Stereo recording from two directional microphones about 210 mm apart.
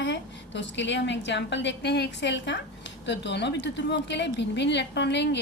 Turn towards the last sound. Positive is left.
turn(degrees=55)  # may be behind; listen again after turning